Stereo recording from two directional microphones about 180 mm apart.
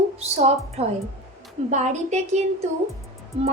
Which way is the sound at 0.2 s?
35° right (ahead or behind).